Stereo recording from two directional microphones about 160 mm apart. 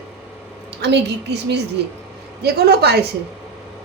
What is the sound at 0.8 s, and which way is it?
Speech, 90° right.